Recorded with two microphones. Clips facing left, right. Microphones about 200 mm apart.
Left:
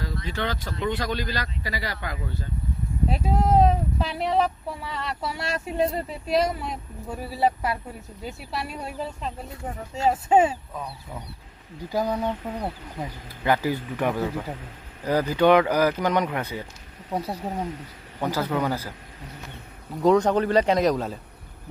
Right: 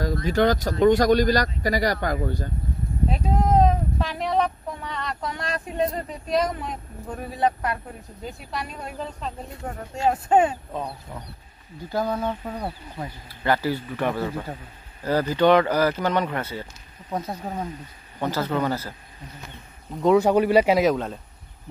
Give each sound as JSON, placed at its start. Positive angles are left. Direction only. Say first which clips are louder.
{"t": 0.0, "sound": "speech", "louder": "right 9 dB", "side_deg": -45}
{"t": 3.1, "sound": "speech", "louder": "even", "side_deg": 5}
{"t": 10.7, "sound": "speech", "louder": "right 4 dB", "side_deg": -20}
{"t": 11.9, "sound": "speech", "louder": "even", "side_deg": 15}
{"t": 20.0, "sound": "speech", "louder": "right 1 dB", "side_deg": -5}